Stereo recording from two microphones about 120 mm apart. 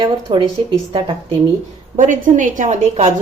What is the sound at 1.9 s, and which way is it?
A woman's voice, 90° right.